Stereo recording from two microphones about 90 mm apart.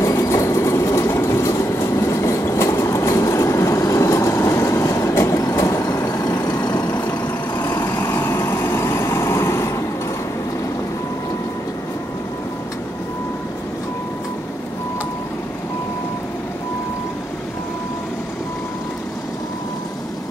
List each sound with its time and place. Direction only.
0.0 s train: 35° left (ahead or behind)
6.6 s vehicle: 50° left (ahead or behind)
7.1 s vehicle: 25° left (ahead or behind)